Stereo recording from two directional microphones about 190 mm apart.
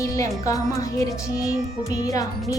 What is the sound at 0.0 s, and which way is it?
Music, 15° left (ahead or behind).